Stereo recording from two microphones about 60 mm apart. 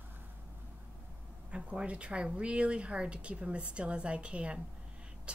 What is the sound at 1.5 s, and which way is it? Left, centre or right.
A woman's voice, centre.